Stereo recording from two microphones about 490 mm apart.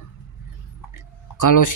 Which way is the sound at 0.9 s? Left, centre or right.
Left.